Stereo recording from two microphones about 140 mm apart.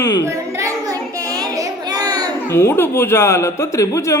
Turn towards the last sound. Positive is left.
turn(degrees=20)  # may be behind; listen again after turning